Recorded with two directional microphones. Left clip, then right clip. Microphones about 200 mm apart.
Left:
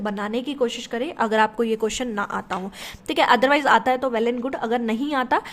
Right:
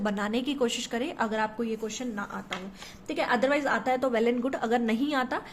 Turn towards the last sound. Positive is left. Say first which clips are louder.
# left 5 dB
turn(degrees=20)  # may be behind; listen again after turning